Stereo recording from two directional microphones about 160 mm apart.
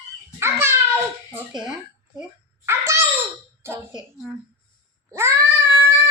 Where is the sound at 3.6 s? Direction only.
15° right (ahead or behind).